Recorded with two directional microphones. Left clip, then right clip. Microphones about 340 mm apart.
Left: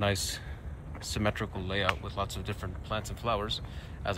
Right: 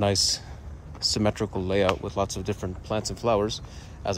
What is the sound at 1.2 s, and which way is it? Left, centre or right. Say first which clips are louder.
Speech: right 6 dB; centre.